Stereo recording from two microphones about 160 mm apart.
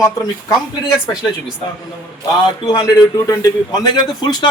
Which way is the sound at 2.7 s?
20° left (ahead or behind).